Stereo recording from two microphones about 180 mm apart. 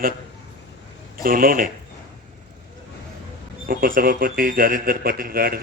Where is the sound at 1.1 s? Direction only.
55° right (ahead or behind).